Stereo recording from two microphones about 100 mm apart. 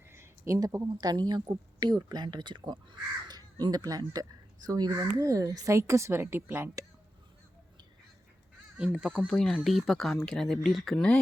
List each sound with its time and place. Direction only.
0.1 s a sound: 30° right (ahead or behind)
0.9 s speech: 45° right (ahead or behind); by 6.8 s 25° right (ahead or behind)
8.8 s speech: 5° right (ahead or behind)